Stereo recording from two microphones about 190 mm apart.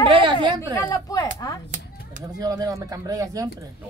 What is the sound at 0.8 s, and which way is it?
Speech, 20° left (ahead or behind).